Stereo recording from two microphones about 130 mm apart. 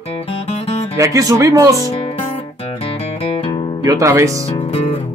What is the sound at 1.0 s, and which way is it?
Speech, 25° right (ahead or behind).